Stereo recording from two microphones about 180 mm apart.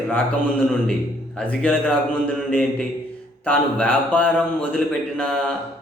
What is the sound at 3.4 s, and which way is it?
A man's voice, 10° left (ahead or behind).